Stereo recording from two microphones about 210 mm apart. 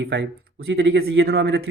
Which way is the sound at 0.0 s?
55° right (ahead or behind).